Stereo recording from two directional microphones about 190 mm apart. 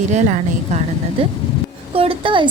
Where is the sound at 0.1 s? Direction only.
40° right (ahead or behind).